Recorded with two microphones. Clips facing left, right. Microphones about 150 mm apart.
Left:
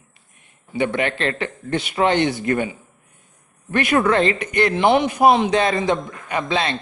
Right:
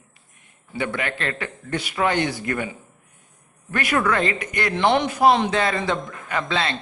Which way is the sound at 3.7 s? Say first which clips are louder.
Left 4 dB; 25° left (ahead or behind).